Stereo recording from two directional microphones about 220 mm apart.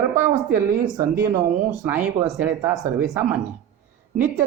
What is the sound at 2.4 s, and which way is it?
Speech, 10° right (ahead or behind).